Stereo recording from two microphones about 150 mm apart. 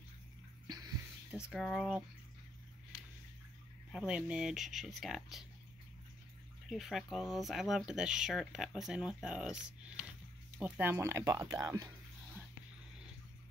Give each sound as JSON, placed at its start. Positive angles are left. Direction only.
{"t": 1.3, "sound": "speech", "side_deg": 0}
{"t": 3.9, "sound": "speech", "side_deg": -5}
{"t": 6.7, "sound": "speech", "side_deg": 0}